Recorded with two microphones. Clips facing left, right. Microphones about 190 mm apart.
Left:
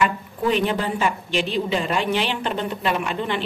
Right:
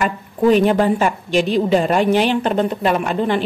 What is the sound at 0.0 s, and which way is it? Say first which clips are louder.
A woman's voice: right 5 dB; 45° right (ahead or behind).